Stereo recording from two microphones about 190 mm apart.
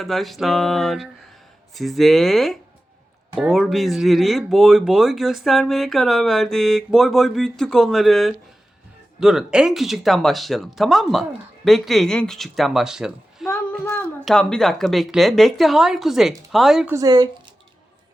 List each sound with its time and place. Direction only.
0.0 s speech: centre (ahead or behind)
13.5 s a sound: 10° left (ahead or behind)
14.3 s speech: centre (ahead or behind)
16.9 s speech: 20° right (ahead or behind)